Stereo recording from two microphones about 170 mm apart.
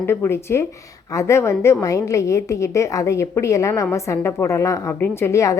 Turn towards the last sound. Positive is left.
turn(degrees=20)  # may be behind; listen again after turning